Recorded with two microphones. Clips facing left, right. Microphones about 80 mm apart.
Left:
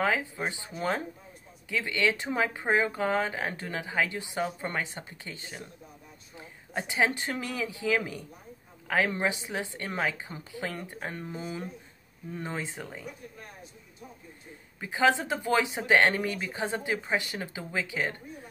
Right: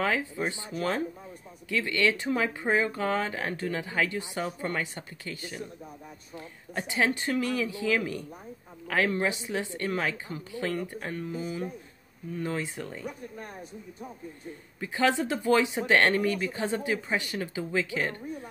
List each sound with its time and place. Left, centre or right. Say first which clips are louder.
0.0 s speech: even; centre
6.7 s speech: even; centre
11.1 s speech: right 6 dB; left
12.4 s speech: right 3 dB; left
13.0 s speech: right 5 dB; right
14.8 s speech: left 1 dB; centre